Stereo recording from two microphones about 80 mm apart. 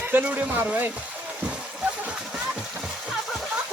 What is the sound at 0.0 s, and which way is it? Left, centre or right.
Speech, right.